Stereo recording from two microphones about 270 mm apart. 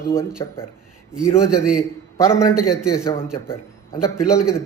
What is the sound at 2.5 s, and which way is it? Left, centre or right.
Speech, centre.